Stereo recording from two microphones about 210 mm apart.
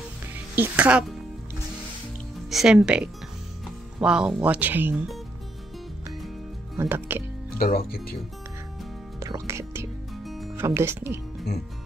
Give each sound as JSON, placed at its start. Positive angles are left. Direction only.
{"t": 0.6, "sound": "speech", "side_deg": -5}
{"t": 2.5, "sound": "speech", "side_deg": -5}
{"t": 6.8, "sound": "speech", "side_deg": -10}
{"t": 7.5, "sound": "speech", "side_deg": 45}
{"t": 9.2, "sound": "music", "side_deg": -15}
{"t": 10.2, "sound": "music", "side_deg": 0}
{"t": 10.5, "sound": "speech", "side_deg": -10}